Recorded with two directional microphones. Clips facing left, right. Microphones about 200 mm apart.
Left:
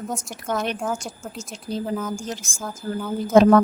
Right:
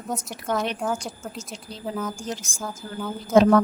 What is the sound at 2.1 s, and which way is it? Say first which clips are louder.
Speech: left 1 dB; 50° left (ahead or behind).